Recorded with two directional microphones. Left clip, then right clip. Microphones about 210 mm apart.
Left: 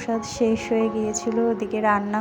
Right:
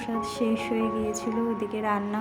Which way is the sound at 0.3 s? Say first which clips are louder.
Left 7 dB; 15° left (ahead or behind).